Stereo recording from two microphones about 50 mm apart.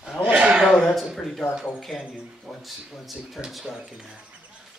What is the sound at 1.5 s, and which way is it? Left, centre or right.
Speech, centre.